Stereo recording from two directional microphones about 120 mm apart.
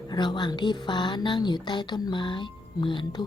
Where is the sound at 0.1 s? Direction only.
40° left (ahead or behind).